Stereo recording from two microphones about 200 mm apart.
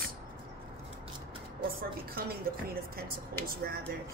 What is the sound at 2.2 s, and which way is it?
Speech, 50° right (ahead or behind).